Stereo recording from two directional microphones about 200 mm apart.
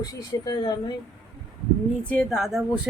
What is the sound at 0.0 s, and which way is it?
Speech, 20° left (ahead or behind).